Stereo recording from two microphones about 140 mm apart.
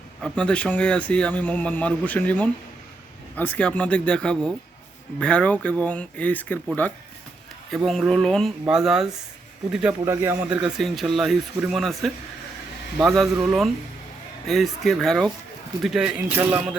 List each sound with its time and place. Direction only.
0.2 s speech: 5° left (ahead or behind)
10.1 s speech: 15° right (ahead or behind)
10.5 s speech: 5° right (ahead or behind)